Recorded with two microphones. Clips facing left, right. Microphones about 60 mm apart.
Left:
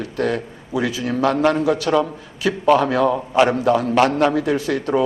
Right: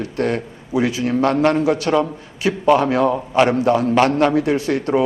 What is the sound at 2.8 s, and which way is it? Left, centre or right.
Speech, right.